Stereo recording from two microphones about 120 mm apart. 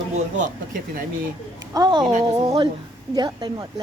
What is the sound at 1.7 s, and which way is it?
A woman's voice, 35° right (ahead or behind).